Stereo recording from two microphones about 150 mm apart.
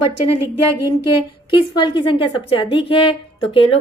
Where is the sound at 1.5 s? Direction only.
30° left (ahead or behind).